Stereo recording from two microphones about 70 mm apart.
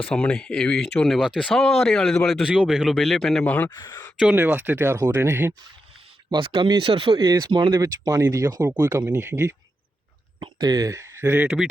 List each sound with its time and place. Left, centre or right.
0.0 s a man's voice: centre
3.4 s speech: left
3.8 s speech: left
4.4 s speech: right
6.3 s speech: right
7.5 s speech: right
9.1 s speech: right
10.6 s speech: right
10.8 s speech: right
11.4 s speech: centre